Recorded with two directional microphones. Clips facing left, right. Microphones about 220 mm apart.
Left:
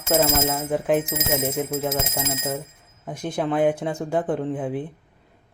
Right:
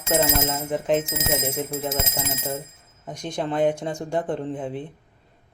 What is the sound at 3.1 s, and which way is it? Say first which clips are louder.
Speech: left 3 dB; 5° left (ahead or behind).